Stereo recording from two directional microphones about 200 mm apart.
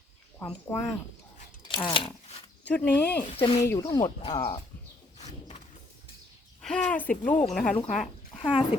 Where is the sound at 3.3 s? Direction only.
25° left (ahead or behind).